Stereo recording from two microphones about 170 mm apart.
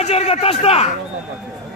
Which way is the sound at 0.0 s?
40° left (ahead or behind).